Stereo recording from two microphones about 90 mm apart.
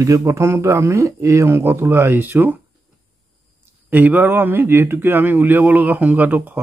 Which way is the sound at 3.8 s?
20° right (ahead or behind).